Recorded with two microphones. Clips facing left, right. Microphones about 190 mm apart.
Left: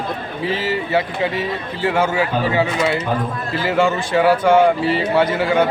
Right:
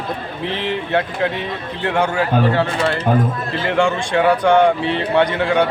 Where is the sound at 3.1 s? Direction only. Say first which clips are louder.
Right 5 dB; 50° right (ahead or behind).